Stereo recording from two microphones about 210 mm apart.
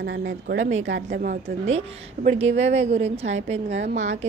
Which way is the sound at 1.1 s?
40° right (ahead or behind).